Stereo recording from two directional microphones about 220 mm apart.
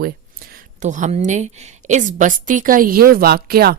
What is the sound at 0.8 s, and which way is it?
A woman's voice, 35° right (ahead or behind).